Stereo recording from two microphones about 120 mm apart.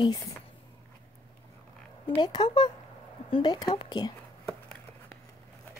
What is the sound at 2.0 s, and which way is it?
A woman's voice, 40° left (ahead or behind).